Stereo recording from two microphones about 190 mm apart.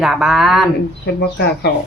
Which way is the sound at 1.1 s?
60° left (ahead or behind).